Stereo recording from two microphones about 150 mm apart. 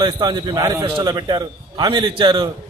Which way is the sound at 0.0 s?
30° right (ahead or behind).